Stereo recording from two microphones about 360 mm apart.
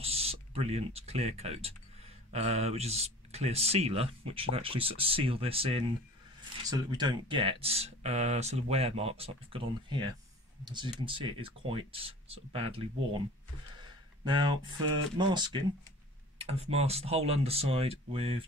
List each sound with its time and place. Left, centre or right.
0.0 s speech: centre
14.2 s speech: centre